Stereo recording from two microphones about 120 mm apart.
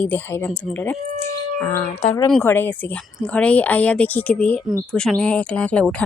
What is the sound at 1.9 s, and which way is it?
Speech, 75° left (ahead or behind).